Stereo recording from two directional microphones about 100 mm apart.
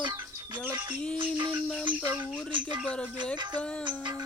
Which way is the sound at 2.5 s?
55° right (ahead or behind).